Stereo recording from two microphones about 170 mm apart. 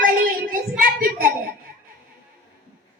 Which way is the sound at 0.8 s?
55° right (ahead or behind).